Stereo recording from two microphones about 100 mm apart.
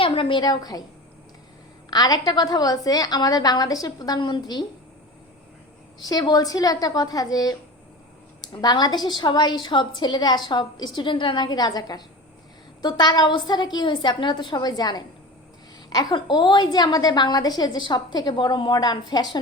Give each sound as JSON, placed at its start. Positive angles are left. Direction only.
{"t": 0.0, "sound": "a woman's voice", "side_deg": 60}
{"t": 1.9, "sound": "a woman's voice", "side_deg": 40}
{"t": 6.1, "sound": "a woman's voice", "side_deg": 40}
{"t": 8.6, "sound": "a woman's voice", "side_deg": 45}
{"t": 16.1, "sound": "a woman's voice", "side_deg": 50}